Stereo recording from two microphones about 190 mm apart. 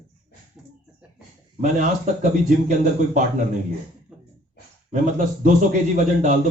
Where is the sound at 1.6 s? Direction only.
40° right (ahead or behind).